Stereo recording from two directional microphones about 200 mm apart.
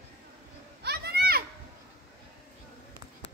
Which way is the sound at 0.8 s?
55° right (ahead or behind).